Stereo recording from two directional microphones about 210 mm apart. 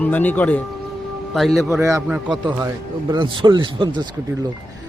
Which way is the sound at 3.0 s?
20° right (ahead or behind).